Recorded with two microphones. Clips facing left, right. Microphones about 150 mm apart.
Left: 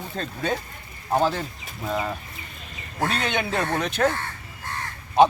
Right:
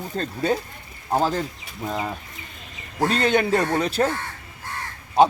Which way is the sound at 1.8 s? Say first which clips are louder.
Even; 20° right (ahead or behind).